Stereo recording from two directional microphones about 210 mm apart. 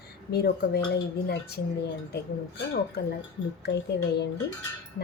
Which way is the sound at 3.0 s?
50° left (ahead or behind).